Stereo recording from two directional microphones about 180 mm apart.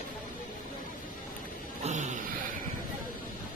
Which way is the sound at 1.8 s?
40° right (ahead or behind).